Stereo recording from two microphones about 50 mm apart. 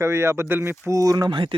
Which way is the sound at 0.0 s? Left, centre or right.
Right.